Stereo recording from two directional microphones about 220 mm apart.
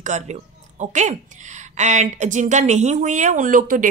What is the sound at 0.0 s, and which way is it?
Speech, 30° right (ahead or behind).